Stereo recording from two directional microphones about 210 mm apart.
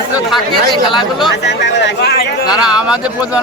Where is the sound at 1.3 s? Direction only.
55° left (ahead or behind).